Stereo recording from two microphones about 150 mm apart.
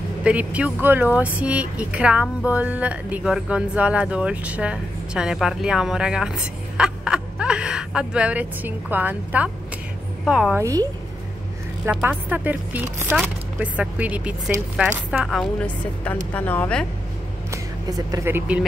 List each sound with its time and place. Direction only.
0.2 s a woman's voice: 10° right (ahead or behind)
10.6 s a woman's voice: 20° right (ahead or behind); by 16.8 s 10° left (ahead or behind)
17.5 s music: 25° right (ahead or behind)